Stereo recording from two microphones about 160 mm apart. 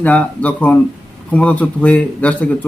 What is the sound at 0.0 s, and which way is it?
Speech, 10° left (ahead or behind).